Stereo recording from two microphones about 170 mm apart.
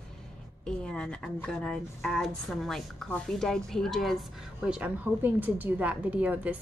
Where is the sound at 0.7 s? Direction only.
5° left (ahead or behind).